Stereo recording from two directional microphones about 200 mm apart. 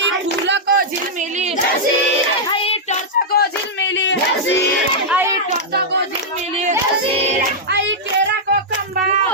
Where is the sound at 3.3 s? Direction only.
65° left (ahead or behind).